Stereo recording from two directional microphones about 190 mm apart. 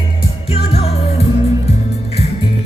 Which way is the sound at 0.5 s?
30° left (ahead or behind).